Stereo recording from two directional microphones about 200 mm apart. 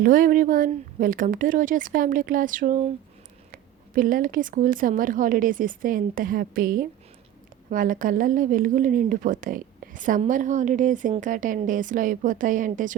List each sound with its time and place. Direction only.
0.0 s a woman's voice: 45° right (ahead or behind)